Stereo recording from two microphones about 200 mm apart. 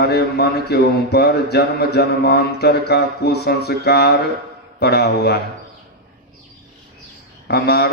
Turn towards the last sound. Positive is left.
turn(degrees=55)  # may be behind; listen again after turning